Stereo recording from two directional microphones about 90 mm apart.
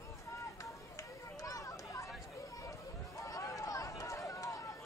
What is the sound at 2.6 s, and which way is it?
Run, 40° left (ahead or behind).